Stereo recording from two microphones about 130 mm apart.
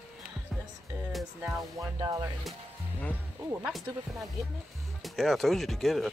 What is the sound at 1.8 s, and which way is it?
Music, 30° right (ahead or behind).